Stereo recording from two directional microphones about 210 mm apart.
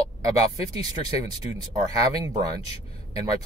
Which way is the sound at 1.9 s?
15° right (ahead or behind).